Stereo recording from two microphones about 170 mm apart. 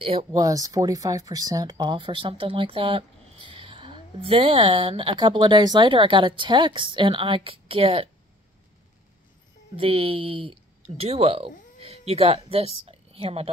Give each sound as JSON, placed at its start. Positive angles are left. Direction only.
{"t": 0.0, "sound": "speech", "side_deg": -35}
{"t": 0.3, "sound": "speech", "side_deg": -20}
{"t": 9.8, "sound": "speech", "side_deg": -35}